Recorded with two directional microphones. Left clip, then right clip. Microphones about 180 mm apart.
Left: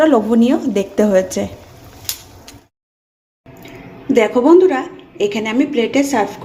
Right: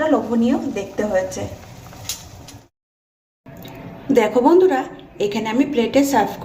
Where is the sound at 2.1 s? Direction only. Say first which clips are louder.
Left 3 dB; 60° left (ahead or behind).